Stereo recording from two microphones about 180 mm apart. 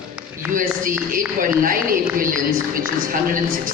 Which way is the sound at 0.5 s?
50° right (ahead or behind).